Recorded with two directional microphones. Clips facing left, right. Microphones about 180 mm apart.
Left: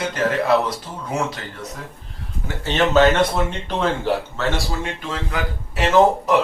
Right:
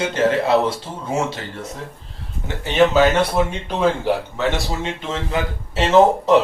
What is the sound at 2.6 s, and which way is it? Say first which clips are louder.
Speech: right 1 dB; 10° right (ahead or behind).